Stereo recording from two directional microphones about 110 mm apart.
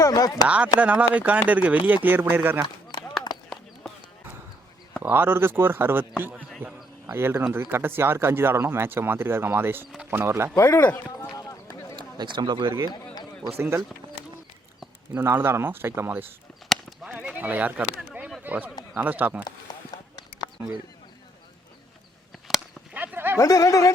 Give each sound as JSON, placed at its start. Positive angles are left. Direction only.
{"t": 0.0, "sound": "speech", "side_deg": 35}
{"t": 0.4, "sound": "speech", "side_deg": -10}
{"t": 5.0, "sound": "speech", "side_deg": -20}
{"t": 10.6, "sound": "speech", "side_deg": 20}
{"t": 11.9, "sound": "speech", "side_deg": -45}
{"t": 13.6, "sound": "speech", "side_deg": -25}
{"t": 15.1, "sound": "speech", "side_deg": -20}
{"t": 19.7, "sound": "a sound", "side_deg": 40}
{"t": 23.0, "sound": "a sound", "side_deg": -20}
{"t": 23.4, "sound": "speech", "side_deg": 30}